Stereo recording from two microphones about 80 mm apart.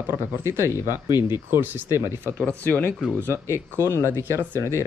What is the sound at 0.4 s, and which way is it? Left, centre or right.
Speech, right.